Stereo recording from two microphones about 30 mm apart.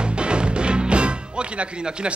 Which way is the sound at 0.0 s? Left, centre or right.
Right.